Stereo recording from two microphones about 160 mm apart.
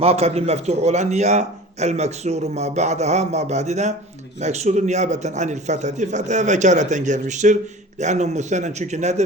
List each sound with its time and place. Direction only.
0.0 s a man's voice: 40° right (ahead or behind)